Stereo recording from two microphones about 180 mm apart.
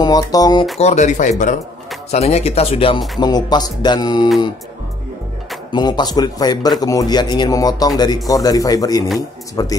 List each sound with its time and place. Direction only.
0.0 s speech: 20° left (ahead or behind)
0.7 s speech: 40° left (ahead or behind); by 4.3 s 25° left (ahead or behind)
5.7 s speech: 25° left (ahead or behind)